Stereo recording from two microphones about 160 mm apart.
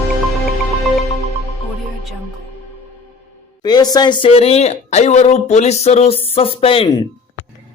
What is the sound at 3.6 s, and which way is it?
Speech, 25° left (ahead or behind).